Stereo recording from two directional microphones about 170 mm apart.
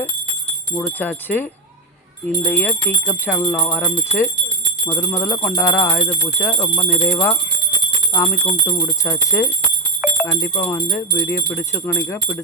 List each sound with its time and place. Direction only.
0.8 s speech: 10° left (ahead or behind)
3.4 s speech: 25° left (ahead or behind)
3.7 s speech: 10° left (ahead or behind)
8.6 s speech: 20° left (ahead or behind)
10.0 s jingle bell: 5° right (ahead or behind)
10.6 s speech: 15° left (ahead or behind)